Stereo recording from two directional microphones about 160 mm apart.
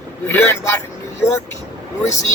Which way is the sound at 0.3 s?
15° left (ahead or behind).